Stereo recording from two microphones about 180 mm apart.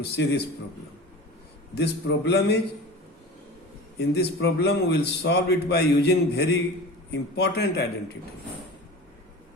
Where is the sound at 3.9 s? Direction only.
70° left (ahead or behind).